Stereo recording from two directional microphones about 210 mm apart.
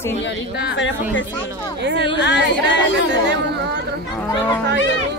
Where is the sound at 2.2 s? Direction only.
55° left (ahead or behind).